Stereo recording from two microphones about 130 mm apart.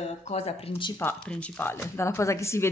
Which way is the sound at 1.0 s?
10° left (ahead or behind).